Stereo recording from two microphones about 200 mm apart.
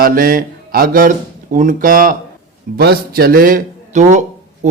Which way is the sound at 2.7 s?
50° right (ahead or behind).